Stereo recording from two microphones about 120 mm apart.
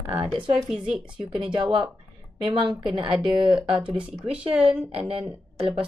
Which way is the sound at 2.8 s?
45° right (ahead or behind).